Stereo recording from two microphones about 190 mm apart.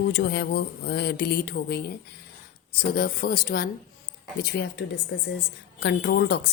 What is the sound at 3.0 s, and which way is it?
Speech, 55° left (ahead or behind).